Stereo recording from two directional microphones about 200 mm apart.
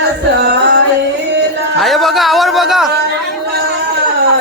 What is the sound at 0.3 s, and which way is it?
Music, 55° right (ahead or behind).